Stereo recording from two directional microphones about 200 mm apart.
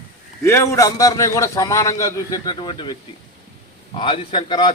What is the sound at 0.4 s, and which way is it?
A man's voice, 15° left (ahead or behind).